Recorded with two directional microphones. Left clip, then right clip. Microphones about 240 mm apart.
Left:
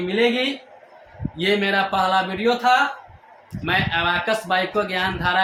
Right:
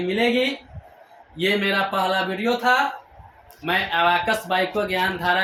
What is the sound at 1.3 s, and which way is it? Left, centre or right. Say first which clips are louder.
Speech: left 1 dB; centre.